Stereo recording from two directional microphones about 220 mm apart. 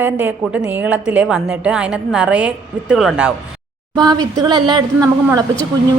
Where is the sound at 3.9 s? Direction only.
20° right (ahead or behind).